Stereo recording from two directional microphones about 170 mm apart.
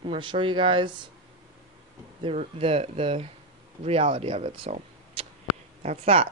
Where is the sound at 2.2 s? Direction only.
30° right (ahead or behind).